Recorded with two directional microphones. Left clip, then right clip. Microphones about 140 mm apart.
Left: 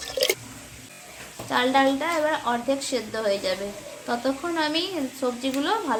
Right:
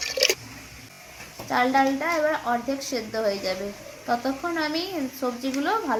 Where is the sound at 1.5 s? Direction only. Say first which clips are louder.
Even; centre (ahead or behind).